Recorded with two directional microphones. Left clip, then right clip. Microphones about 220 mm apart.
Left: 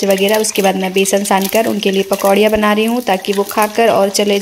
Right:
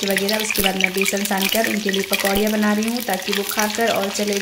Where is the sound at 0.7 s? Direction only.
40° left (ahead or behind).